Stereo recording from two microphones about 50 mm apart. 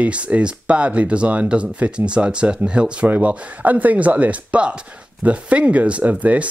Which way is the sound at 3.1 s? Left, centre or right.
Right.